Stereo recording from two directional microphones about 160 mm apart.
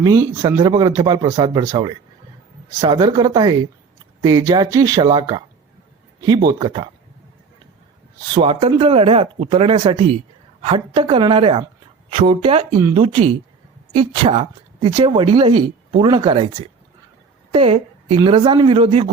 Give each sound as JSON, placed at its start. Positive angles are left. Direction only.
{"t": 0.0, "sound": "speech", "side_deg": -20}
{"t": 8.3, "sound": "a woman's voice", "side_deg": -35}